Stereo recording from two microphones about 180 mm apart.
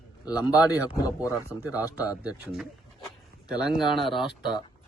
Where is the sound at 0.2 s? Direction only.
20° left (ahead or behind).